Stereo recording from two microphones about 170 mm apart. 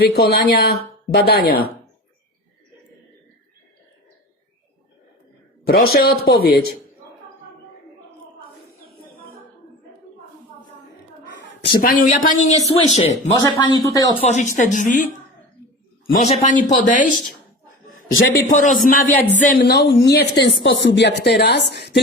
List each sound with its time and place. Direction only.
0.0 s speech: 65° left (ahead or behind)
5.6 s speech: 65° left (ahead or behind)
11.4 s speech: 70° left (ahead or behind); by 13.3 s 40° left (ahead or behind)
13.3 s speech: 25° left (ahead or behind)
14.2 s speech: 40° left (ahead or behind)
16.1 s speech: 40° left (ahead or behind)
18.3 s speech: 50° left (ahead or behind)
19.0 s speech: 10° left (ahead or behind)
19.4 s speech: 60° left (ahead or behind); by 21.2 s 90° left
21.2 s speech: 75° left (ahead or behind)